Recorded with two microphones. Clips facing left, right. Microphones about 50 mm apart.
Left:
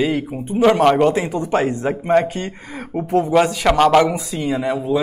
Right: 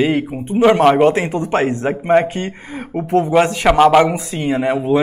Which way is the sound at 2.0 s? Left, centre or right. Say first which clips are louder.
Right 3 dB; right.